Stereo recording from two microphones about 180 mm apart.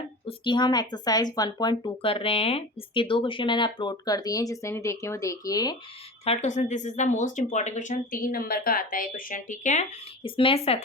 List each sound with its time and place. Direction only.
0.3 s speech: 25° left (ahead or behind)
6.2 s speech: 40° left (ahead or behind)
10.2 s speech: 30° left (ahead or behind)